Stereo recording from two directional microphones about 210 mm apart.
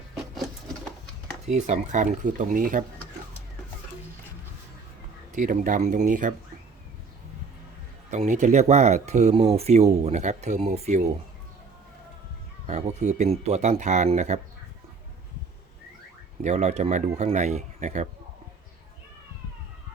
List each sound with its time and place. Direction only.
1.5 s speech: 35° right (ahead or behind)
5.3 s speech: 40° right (ahead or behind)
8.1 s speech: 35° right (ahead or behind)
12.6 s speech: 35° right (ahead or behind)
16.4 s speech: 35° right (ahead or behind)